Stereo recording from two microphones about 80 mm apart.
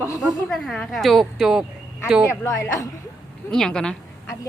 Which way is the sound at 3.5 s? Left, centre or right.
Centre.